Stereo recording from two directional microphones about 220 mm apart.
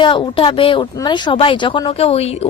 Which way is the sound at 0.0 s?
20° left (ahead or behind).